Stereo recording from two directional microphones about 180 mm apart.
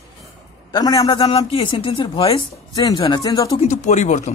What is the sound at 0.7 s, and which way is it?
A man's voice, 20° left (ahead or behind).